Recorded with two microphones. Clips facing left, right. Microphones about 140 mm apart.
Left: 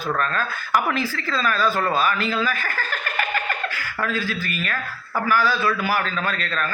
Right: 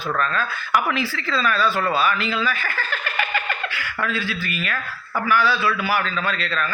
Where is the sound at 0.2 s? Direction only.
40° left (ahead or behind).